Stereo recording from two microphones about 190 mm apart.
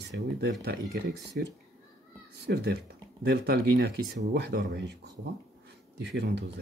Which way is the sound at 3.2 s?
60° right (ahead or behind).